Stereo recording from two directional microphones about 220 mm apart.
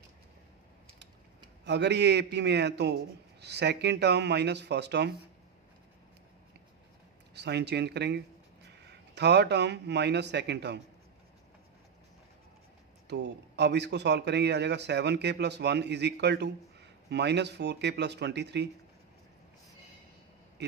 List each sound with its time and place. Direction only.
1.6 s speech: 50° right (ahead or behind)
7.3 s speech: 50° right (ahead or behind)
13.1 s speech: 50° right (ahead or behind)